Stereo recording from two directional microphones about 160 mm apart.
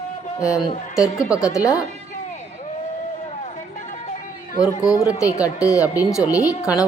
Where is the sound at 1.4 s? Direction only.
20° left (ahead or behind).